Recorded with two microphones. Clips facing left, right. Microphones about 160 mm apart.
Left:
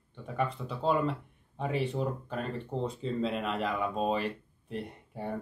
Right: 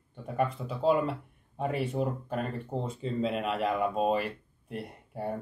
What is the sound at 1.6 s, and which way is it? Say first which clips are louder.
Speech: right 1 dB; 45° right (ahead or behind).